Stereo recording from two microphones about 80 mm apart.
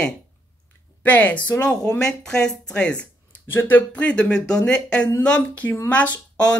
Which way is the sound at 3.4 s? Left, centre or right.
Left.